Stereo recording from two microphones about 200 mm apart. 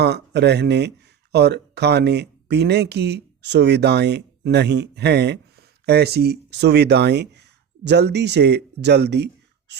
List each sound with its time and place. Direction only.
0.0 s speech: 55° right (ahead or behind)